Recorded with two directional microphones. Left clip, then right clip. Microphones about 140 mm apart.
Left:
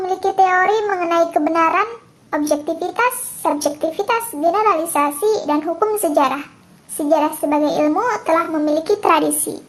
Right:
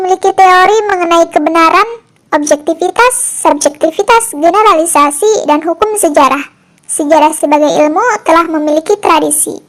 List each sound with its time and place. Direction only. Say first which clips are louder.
0.0 s speech: right 9 dB; 40° right (ahead or behind)